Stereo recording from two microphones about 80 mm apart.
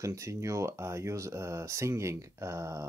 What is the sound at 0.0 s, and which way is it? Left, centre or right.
Speech, right.